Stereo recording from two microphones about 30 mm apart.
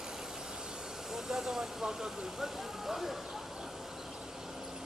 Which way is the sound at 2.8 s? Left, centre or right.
Centre.